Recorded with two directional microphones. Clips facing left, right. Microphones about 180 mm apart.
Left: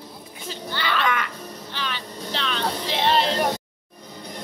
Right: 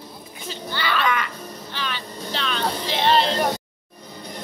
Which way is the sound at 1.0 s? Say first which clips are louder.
Right 1 dB; 55° left (ahead or behind).